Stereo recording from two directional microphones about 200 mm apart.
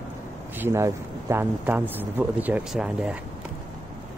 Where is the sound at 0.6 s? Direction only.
15° right (ahead or behind).